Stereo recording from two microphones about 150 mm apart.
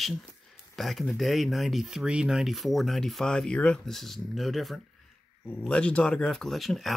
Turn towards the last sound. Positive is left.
turn(degrees=0)  # may be behind; listen again after turning